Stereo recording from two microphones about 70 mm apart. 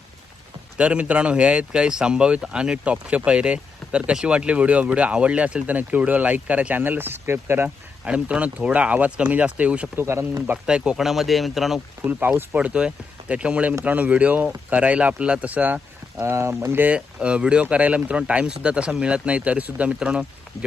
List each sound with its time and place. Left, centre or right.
0.8 s speech: centre; by 7.7 s right
8.0 s speech: centre
9.9 s speech: right
10.7 s speech: centre
12.5 s speech: centre
16.3 s speech: right
16.8 s speech: centre